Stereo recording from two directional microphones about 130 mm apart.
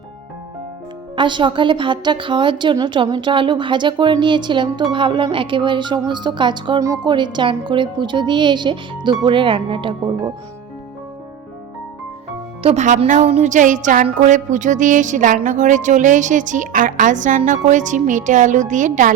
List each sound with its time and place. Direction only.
1.1 s a woman's voice: 40° right (ahead or behind)
12.6 s speech: 65° right (ahead or behind)
13.1 s music: 60° right (ahead or behind); by 19.1 s 75° right (ahead or behind)